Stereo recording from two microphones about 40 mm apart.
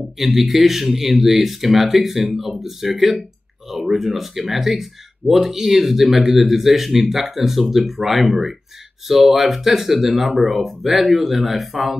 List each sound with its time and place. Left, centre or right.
0.2 s speech: centre